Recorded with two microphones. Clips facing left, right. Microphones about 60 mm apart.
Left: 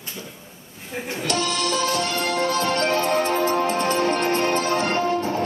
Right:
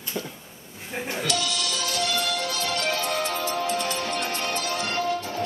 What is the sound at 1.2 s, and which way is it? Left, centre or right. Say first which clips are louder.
Music: left 6 dB; left.